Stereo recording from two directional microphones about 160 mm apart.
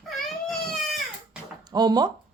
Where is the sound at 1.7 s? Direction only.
25° right (ahead or behind).